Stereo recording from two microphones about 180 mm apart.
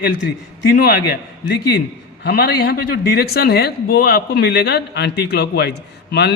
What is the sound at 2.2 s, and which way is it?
A man's voice, 65° left (ahead or behind).